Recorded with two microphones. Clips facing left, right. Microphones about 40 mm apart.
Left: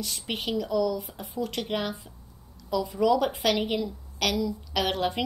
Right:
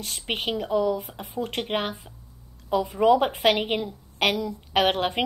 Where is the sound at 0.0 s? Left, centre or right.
Right.